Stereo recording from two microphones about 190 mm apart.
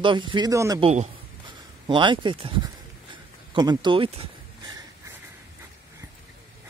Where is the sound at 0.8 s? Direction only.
35° right (ahead or behind).